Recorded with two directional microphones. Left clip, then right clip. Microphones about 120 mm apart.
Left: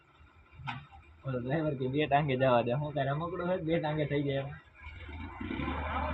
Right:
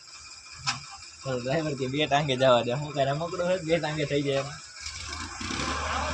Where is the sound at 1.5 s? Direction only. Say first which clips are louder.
Right 3 dB; 45° right (ahead or behind).